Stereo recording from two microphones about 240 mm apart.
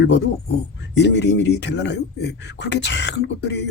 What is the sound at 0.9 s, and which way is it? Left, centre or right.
Speech, left.